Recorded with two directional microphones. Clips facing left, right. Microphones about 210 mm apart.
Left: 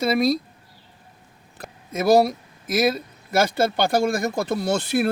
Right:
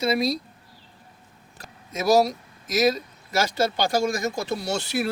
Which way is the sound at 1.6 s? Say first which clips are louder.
Left 3 dB; 55° left (ahead or behind).